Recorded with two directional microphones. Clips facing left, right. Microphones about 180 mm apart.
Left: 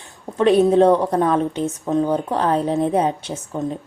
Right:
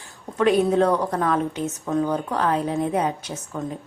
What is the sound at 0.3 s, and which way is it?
A woman's voice, 30° left (ahead or behind).